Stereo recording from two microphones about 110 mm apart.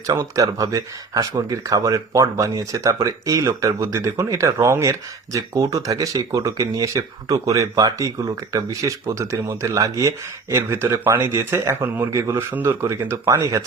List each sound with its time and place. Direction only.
0.1 s speech: 30° right (ahead or behind)